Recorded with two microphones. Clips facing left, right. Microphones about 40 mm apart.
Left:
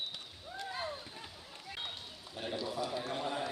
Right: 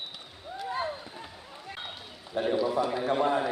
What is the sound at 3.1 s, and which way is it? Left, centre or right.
Speech, right.